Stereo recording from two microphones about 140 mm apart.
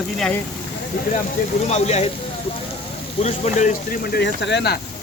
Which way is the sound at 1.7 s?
50° left (ahead or behind).